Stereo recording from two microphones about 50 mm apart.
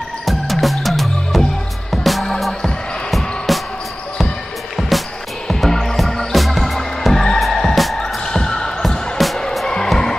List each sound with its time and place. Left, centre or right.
0.2 s music: centre
4.7 s music: centre
8.8 s music: centre